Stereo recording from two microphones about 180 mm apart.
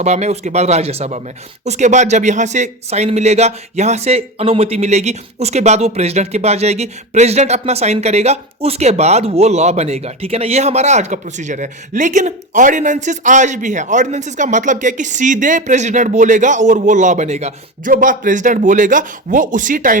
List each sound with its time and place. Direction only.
0.0 s speech: 40° right (ahead or behind)